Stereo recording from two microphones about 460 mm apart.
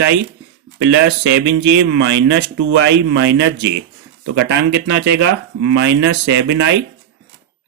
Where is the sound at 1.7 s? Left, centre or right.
Right.